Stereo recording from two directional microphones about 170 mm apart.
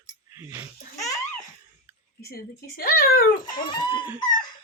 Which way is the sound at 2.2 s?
65° left (ahead or behind).